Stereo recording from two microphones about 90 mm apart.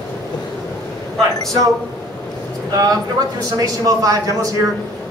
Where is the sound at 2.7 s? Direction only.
45° right (ahead or behind).